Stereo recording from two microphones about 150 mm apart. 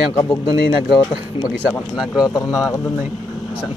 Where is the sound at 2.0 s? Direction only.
Centre (ahead or behind).